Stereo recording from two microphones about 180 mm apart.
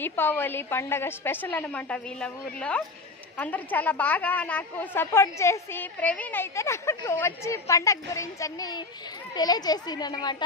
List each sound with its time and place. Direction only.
0.0 s a woman's voice: 10° left (ahead or behind)